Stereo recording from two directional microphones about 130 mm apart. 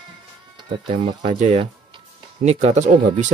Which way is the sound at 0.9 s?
55° right (ahead or behind).